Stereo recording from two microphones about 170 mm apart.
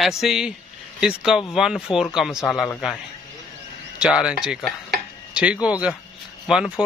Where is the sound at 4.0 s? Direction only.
5° right (ahead or behind).